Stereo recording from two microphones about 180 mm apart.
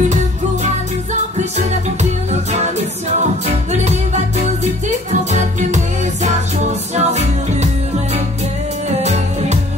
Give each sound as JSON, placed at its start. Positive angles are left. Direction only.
{"t": 3.7, "sound": "music", "side_deg": -40}